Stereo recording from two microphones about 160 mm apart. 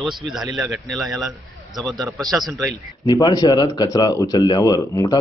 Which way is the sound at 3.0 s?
25° left (ahead or behind).